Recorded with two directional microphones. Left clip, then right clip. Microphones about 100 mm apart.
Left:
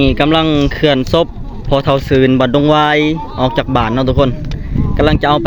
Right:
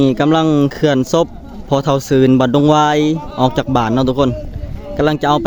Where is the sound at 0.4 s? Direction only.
50° right (ahead or behind).